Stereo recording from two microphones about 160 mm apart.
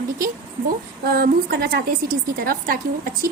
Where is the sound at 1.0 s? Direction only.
70° right (ahead or behind).